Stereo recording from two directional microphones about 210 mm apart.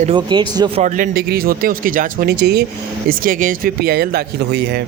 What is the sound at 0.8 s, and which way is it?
Speech, 40° right (ahead or behind).